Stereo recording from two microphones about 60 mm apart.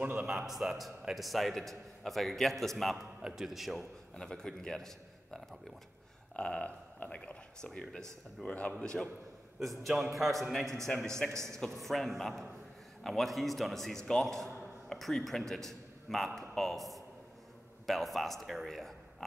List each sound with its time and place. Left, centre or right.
0.2 s a man's voice: centre
3.2 s a man's voice: centre
4.2 s a man's voice: centre
6.3 s a man's voice: centre